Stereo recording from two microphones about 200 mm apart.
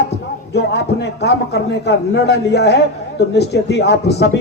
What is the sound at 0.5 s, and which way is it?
A man's voice, 55° left (ahead or behind).